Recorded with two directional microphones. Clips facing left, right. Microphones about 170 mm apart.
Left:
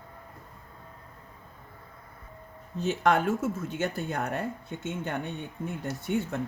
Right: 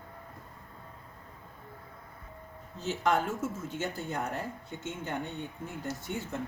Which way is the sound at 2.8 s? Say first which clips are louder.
Left 4 dB; 65° left (ahead or behind).